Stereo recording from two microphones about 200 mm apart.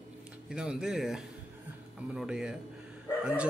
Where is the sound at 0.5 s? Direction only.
5° right (ahead or behind).